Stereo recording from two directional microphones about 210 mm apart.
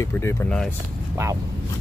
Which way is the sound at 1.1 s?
15° right (ahead or behind).